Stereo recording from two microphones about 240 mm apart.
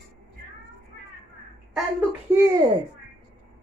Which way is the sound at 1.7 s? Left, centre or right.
Centre.